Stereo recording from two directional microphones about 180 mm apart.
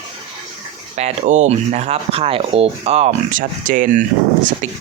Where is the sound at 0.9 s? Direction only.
40° right (ahead or behind).